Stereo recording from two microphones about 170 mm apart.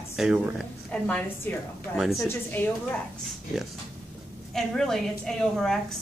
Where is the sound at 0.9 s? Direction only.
10° left (ahead or behind).